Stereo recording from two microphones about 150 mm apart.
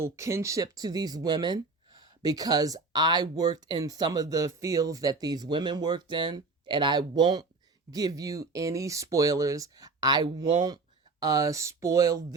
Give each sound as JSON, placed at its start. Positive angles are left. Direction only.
{"t": 0.0, "sound": "speech", "side_deg": -20}